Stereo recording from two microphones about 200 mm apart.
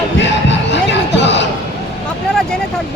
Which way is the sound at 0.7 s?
60° left (ahead or behind).